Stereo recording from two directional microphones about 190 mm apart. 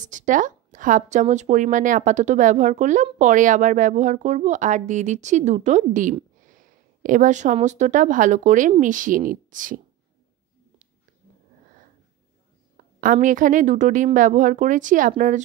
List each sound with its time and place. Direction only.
0.0 s a woman's voice: 40° right (ahead or behind)
13.0 s a woman's voice: 45° right (ahead or behind)